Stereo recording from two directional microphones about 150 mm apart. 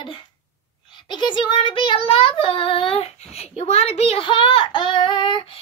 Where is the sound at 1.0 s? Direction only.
30° left (ahead or behind).